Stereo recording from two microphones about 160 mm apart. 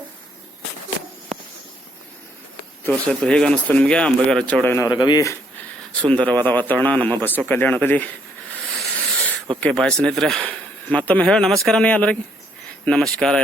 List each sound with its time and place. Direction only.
2.8 s speech: 5° left (ahead or behind)
4.9 s speech: 25° left (ahead or behind)
6.0 s speech: 5° left (ahead or behind)
8.7 s a sound: 5° left (ahead or behind)
9.6 s speech: 5° left (ahead or behind)